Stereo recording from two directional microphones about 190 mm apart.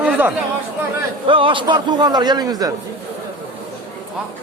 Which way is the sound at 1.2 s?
25° right (ahead or behind).